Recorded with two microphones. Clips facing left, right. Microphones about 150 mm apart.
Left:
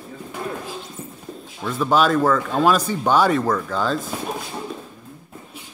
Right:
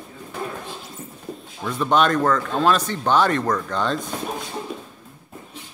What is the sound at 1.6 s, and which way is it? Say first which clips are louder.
Speech: left 1 dB; 5° left (ahead or behind).